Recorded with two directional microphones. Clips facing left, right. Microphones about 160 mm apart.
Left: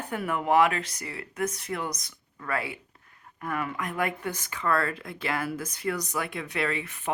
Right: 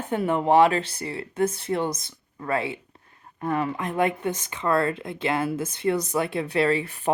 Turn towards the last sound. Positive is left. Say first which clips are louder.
# right 8 dB
turn(degrees=-35)  # may be behind; listen again after turning